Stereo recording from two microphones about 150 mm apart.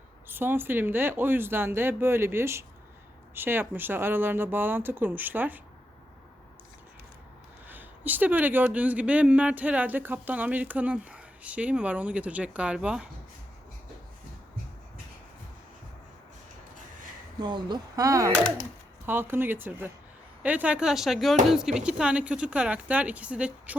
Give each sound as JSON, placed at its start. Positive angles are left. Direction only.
{"t": 0.3, "sound": "speech", "side_deg": -15}
{"t": 7.7, "sound": "speech", "side_deg": -10}
{"t": 17.4, "sound": "speech", "side_deg": -30}